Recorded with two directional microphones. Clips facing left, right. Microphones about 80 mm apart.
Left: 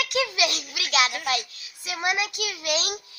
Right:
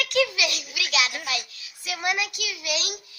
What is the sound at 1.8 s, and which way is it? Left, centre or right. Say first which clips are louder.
A child's voice: left 1 dB; left.